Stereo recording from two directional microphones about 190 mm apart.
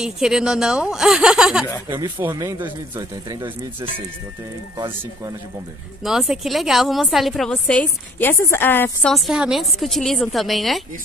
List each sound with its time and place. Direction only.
0.0 s a woman's voice: 5° right (ahead or behind)
1.9 s speech: 20° right (ahead or behind)
6.0 s a woman's voice: 5° right (ahead or behind)
9.1 s a woman's voice: centre (ahead or behind)